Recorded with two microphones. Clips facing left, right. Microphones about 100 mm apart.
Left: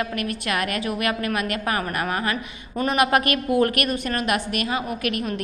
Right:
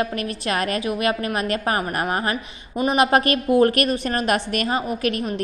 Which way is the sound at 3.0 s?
30° right (ahead or behind).